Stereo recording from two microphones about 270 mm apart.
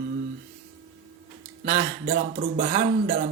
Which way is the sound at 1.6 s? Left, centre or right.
Right.